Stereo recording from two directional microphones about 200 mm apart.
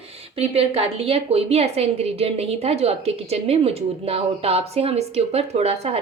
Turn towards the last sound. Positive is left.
turn(degrees=-30)  # may be behind; listen again after turning